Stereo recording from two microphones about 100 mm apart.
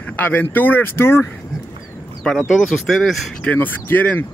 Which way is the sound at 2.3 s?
5° left (ahead or behind).